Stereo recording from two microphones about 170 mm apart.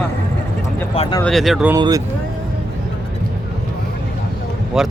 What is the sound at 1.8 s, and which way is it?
Speech, 25° right (ahead or behind).